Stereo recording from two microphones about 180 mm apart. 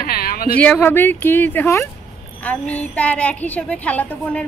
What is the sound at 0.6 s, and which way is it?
A woman's voice, 10° left (ahead or behind).